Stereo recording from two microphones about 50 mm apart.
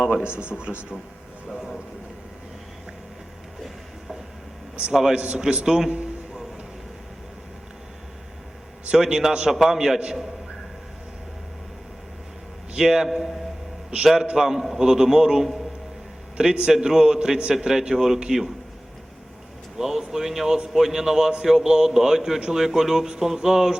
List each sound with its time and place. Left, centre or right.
0.0 s a man's voice: centre
0.5 s speech: centre
1.5 s a sound: centre
4.9 s speech: centre
5.1 s speech: centre
8.9 s speech: centre
12.7 s speech: centre
17.5 s speech: centre
19.8 s speech: centre